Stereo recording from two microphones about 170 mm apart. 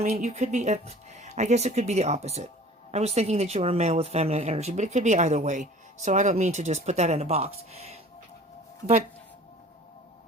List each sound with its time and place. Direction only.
0.0 s speech: 40° right (ahead or behind)